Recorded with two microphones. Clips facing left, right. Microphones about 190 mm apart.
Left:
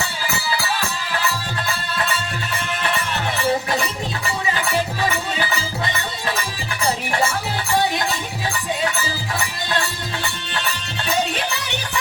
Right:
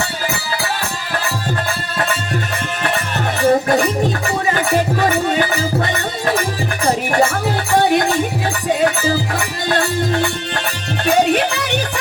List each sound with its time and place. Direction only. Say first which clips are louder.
2.8 s music: right 4 dB; 50° right (ahead or behind)